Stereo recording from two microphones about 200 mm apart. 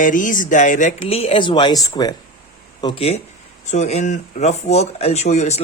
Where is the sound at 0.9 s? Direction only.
30° left (ahead or behind).